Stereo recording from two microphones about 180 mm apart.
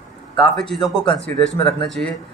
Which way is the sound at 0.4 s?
5° left (ahead or behind).